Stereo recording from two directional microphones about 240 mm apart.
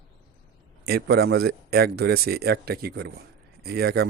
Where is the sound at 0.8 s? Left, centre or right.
Right.